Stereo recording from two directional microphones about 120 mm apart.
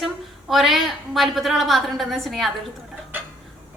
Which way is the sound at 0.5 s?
Centre (ahead or behind).